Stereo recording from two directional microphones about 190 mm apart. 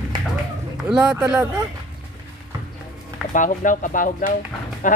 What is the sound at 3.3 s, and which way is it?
Speech, 45° left (ahead or behind).